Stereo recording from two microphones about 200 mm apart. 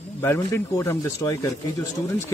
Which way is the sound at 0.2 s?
15° left (ahead or behind).